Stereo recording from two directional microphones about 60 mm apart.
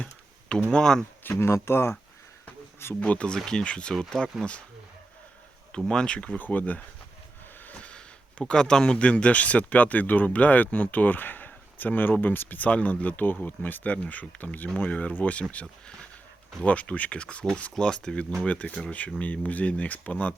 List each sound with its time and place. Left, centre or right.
0.0 s computer keyboard: centre
0.7 s speech: centre
1.3 s speech: left
2.9 s speech: left
5.7 s speech: centre
6.4 s speech: left
16.6 s speech: left